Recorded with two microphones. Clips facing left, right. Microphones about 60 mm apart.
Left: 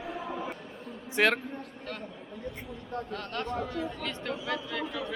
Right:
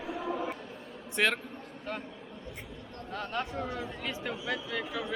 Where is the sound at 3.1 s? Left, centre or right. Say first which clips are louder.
Right 2 dB; centre.